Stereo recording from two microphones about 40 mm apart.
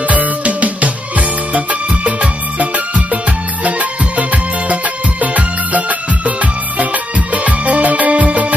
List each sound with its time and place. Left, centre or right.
0.1 s music: right